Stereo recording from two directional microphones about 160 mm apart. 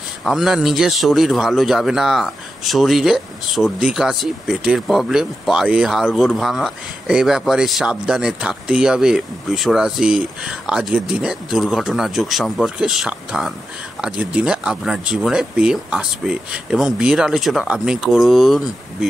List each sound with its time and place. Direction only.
0.2 s a man's voice: centre (ahead or behind)